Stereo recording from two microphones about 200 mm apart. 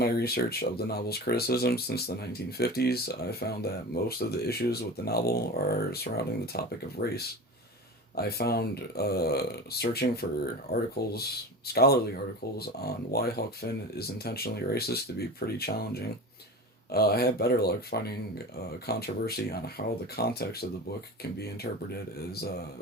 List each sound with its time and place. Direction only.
0.0 s speech: 50° left (ahead or behind)